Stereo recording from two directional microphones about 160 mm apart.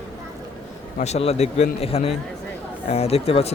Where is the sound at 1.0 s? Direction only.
40° left (ahead or behind).